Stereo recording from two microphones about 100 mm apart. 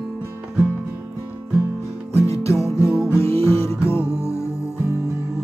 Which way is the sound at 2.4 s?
30° left (ahead or behind).